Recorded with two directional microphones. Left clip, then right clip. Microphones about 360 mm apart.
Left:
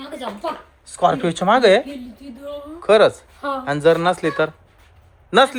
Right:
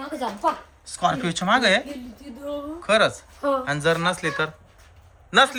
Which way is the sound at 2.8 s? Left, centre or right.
Centre.